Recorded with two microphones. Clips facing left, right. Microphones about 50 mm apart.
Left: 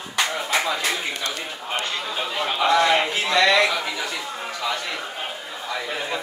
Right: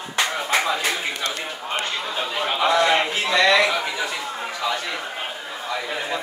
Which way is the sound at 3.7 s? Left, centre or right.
Centre.